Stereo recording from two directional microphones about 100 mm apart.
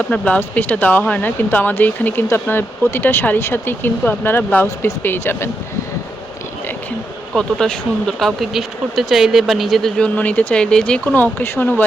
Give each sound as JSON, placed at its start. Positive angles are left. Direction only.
{"t": 0.1, "sound": "speech", "side_deg": 15}
{"t": 7.3, "sound": "speech", "side_deg": 5}
{"t": 10.2, "sound": "speech", "side_deg": 15}